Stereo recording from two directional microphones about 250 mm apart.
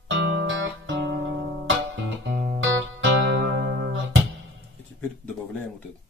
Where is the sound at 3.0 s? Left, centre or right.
Right.